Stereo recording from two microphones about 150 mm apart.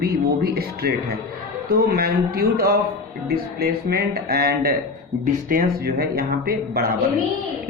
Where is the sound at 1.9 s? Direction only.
90° right.